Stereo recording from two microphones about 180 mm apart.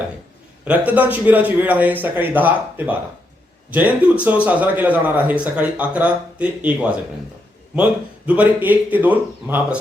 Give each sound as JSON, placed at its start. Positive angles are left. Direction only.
{"t": 0.6, "sound": "speech", "side_deg": -10}
{"t": 8.3, "sound": "speech", "side_deg": -10}